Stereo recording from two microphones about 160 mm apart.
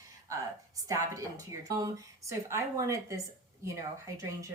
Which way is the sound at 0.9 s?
20° right (ahead or behind).